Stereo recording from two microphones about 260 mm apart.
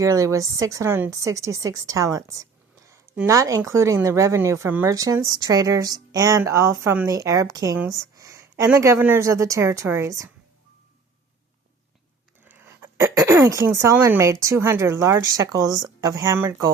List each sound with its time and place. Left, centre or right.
0.0 s a woman's voice: centre
12.5 s a woman's voice: centre